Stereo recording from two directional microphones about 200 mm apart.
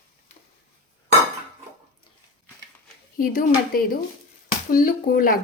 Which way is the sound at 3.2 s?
45° left (ahead or behind).